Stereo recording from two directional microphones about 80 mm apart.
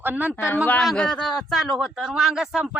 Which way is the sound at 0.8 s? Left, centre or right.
Centre.